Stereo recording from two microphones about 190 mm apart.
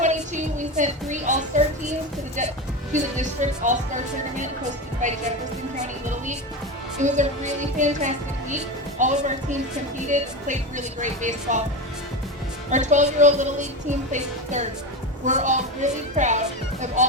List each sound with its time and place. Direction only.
0.0 s child singing: 40° right (ahead or behind)
2.9 s speech: 40° right (ahead or behind)
7.0 s speech: 40° right (ahead or behind)
12.7 s speech: 40° right (ahead or behind)